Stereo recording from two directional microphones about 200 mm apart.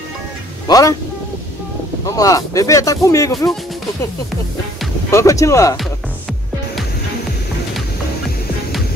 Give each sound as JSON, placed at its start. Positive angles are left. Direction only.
{"t": 0.7, "sound": "speech", "side_deg": 15}
{"t": 2.0, "sound": "speech", "side_deg": 15}
{"t": 5.1, "sound": "speech", "side_deg": 15}